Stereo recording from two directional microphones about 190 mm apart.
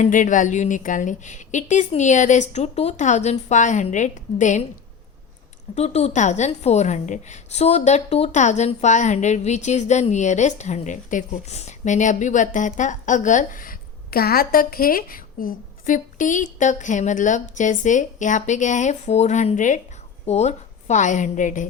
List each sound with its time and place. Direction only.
0.0 s a woman's voice: 40° left (ahead or behind)
5.7 s a woman's voice: 35° left (ahead or behind)